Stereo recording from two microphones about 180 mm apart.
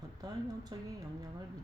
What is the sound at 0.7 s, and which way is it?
Speech, 20° right (ahead or behind).